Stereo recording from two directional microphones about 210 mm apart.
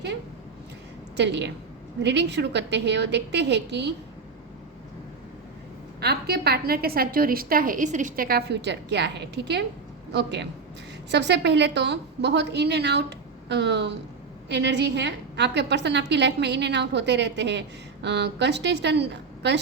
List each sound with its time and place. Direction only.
1.1 s a woman's voice: 55° right (ahead or behind)
6.0 s a woman's voice: 50° right (ahead or behind)